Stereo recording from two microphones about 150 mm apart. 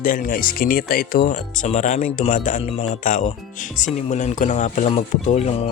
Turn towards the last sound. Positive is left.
turn(degrees=45)  # may be behind; listen again after turning